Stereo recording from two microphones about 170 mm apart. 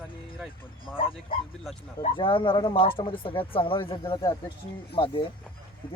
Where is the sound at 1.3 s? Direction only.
30° left (ahead or behind).